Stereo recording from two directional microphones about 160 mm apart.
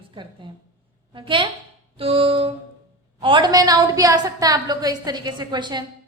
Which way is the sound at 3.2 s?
30° right (ahead or behind).